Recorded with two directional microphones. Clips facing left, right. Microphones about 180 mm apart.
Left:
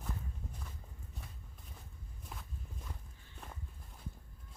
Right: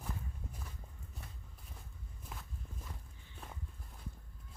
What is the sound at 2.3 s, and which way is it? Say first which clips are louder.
Walk: even; centre (ahead or behind).